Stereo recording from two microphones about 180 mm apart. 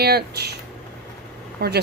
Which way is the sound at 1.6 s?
60° right (ahead or behind).